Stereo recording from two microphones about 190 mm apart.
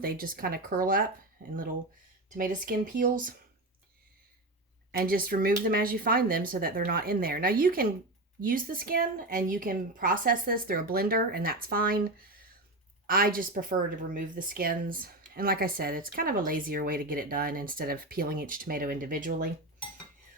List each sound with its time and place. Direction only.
0.0 s speech: 50° right (ahead or behind)
1.4 s speech: 70° right (ahead or behind)
2.3 s speech: 45° right (ahead or behind)
4.9 s speech: 50° right (ahead or behind)